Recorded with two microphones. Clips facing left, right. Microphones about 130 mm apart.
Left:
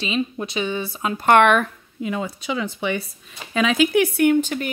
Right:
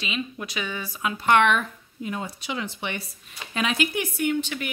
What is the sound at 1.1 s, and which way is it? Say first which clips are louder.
Speech: left 5 dB; 50° left (ahead or behind).